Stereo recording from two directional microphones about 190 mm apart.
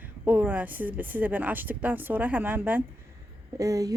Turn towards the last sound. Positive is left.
turn(degrees=-15)  # may be behind; listen again after turning